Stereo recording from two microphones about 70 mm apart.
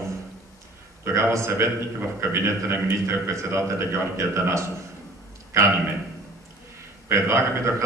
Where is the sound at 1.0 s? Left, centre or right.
Right.